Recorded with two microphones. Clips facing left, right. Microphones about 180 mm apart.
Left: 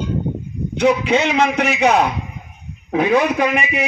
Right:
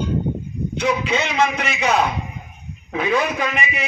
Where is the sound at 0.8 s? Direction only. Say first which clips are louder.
Left 6 dB; 65° left (ahead or behind).